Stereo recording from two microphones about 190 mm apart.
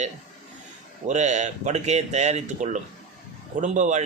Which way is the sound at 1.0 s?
40° right (ahead or behind).